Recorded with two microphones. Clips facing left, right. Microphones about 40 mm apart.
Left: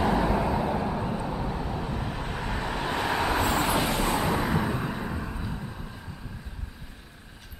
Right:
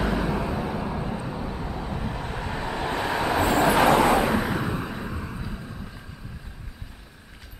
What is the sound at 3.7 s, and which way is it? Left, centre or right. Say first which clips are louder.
Vehicle: right 8 dB; right.